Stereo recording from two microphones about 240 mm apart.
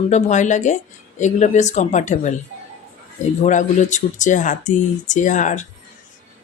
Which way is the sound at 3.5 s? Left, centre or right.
Left.